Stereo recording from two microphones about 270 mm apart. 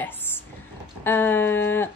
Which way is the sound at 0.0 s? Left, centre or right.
Centre.